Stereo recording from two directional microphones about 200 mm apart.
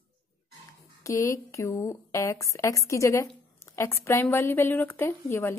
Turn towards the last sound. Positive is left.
turn(degrees=10)  # may be behind; listen again after turning